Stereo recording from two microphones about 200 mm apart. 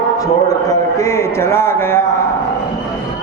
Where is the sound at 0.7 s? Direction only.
15° left (ahead or behind).